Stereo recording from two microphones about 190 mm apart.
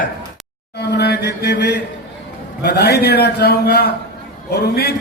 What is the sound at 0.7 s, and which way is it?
Chant, 60° left (ahead or behind).